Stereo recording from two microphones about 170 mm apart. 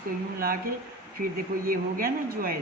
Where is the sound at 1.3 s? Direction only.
60° right (ahead or behind).